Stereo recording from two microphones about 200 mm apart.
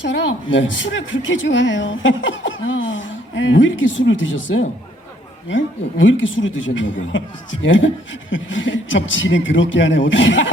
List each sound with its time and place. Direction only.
0.0 s a woman's voice: 65° left (ahead or behind)